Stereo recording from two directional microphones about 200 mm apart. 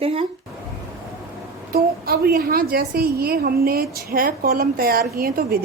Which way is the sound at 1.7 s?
50° right (ahead or behind).